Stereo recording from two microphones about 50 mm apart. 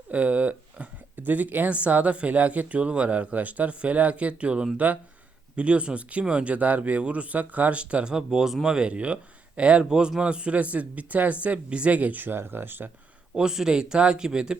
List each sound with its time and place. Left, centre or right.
0.1 s speech: right; by 8.9 s centre
8.9 s speech: right
13.3 s speech: centre